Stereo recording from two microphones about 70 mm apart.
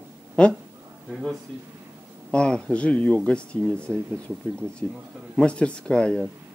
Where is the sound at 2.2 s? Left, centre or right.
Centre.